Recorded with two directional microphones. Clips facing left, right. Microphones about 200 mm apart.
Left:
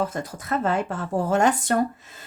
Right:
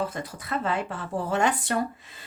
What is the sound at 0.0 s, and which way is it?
Speech, 45° left (ahead or behind).